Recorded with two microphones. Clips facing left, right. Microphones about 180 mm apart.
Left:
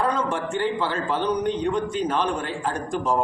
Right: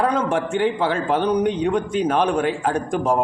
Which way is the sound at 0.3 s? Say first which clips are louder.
Right 5 dB; 55° right (ahead or behind).